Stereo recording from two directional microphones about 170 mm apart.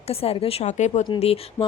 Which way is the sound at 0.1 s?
35° left (ahead or behind).